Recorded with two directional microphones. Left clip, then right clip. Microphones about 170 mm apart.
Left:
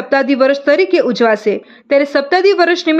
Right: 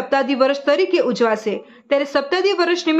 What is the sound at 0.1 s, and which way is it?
Speech, 20° left (ahead or behind).